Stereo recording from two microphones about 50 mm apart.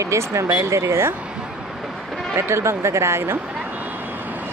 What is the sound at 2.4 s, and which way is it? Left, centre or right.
Speech, right.